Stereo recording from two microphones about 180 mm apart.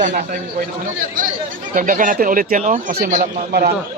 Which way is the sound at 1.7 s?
50° right (ahead or behind).